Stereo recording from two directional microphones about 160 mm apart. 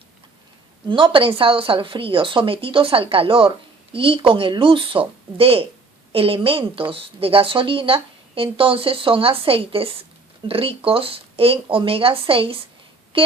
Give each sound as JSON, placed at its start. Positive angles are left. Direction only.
{"t": 0.9, "sound": "a woman's voice", "side_deg": -30}
{"t": 13.1, "sound": "music", "side_deg": -35}